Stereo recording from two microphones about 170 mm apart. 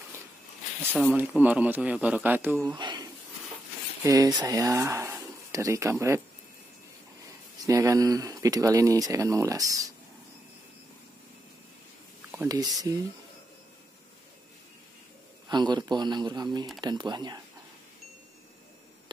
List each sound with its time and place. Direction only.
0.9 s speech: 5° right (ahead or behind)
2.7 s a sound: 25° right (ahead or behind)
4.0 s speech: 20° right (ahead or behind)
7.6 s speech: 20° right (ahead or behind)
12.3 s speech: 20° right (ahead or behind)
15.4 s speech: 25° right (ahead or behind)